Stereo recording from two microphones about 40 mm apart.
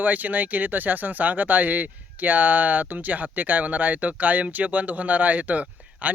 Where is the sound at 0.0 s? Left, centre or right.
Right.